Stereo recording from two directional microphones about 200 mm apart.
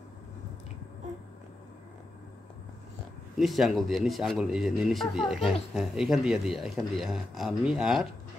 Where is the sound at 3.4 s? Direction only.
Centre (ahead or behind).